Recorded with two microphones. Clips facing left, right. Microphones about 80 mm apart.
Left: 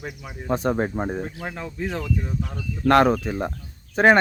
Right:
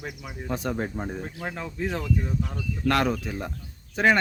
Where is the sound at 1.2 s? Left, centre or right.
Centre.